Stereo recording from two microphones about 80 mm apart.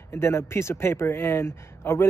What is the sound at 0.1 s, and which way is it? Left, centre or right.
Speech, left.